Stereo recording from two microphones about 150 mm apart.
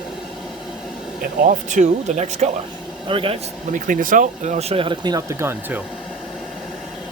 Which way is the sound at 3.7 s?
65° right (ahead or behind).